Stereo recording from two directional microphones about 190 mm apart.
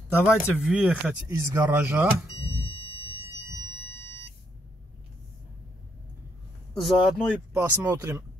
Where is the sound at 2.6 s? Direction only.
30° left (ahead or behind).